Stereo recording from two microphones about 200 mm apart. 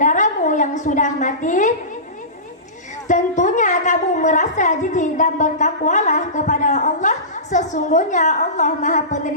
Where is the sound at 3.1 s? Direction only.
40° left (ahead or behind).